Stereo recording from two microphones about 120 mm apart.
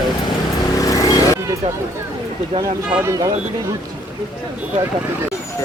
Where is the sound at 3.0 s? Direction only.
25° right (ahead or behind).